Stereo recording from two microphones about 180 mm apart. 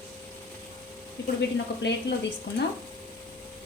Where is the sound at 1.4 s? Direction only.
70° left (ahead or behind).